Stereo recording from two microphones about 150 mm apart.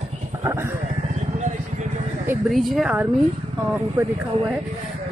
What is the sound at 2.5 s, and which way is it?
Speech, centre (ahead or behind).